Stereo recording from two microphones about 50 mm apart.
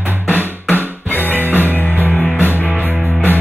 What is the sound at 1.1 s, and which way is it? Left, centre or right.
Music, left.